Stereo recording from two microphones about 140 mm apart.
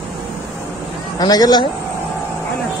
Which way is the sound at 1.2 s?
30° left (ahead or behind).